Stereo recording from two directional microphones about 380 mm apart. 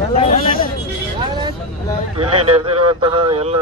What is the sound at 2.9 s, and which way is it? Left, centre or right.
Speech, centre.